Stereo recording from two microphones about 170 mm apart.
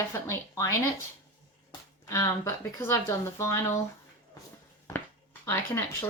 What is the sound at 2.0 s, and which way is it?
Speech, 20° left (ahead or behind).